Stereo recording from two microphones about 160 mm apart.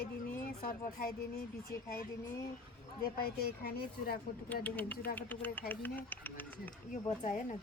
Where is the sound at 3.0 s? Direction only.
70° left (ahead or behind).